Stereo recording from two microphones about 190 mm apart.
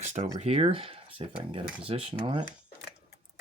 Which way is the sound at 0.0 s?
35° right (ahead or behind).